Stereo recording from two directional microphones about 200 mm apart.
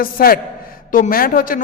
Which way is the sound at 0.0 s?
45° left (ahead or behind).